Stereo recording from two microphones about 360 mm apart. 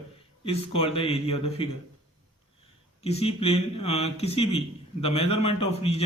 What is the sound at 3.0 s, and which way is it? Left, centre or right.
A man's voice, centre.